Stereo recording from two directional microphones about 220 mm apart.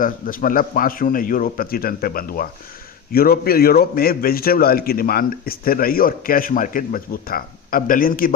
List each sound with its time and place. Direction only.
0.0 s a man's voice: 40° left (ahead or behind)